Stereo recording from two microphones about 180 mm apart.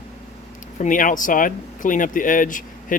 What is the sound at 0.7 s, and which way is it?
Speech, 45° left (ahead or behind).